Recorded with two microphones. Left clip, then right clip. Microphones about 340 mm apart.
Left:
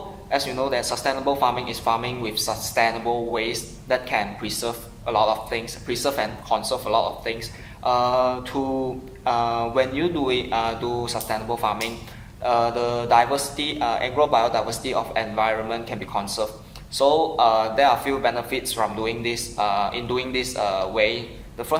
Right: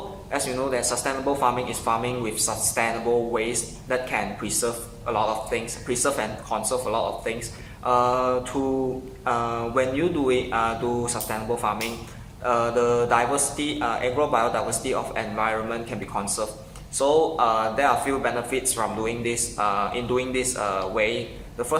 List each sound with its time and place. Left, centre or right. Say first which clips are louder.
0.3 s a man's voice: left 3 dB; centre